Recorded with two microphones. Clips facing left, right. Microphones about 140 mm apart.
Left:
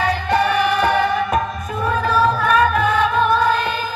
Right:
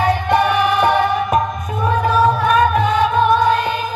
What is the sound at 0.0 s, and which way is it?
Music, 25° right (ahead or behind).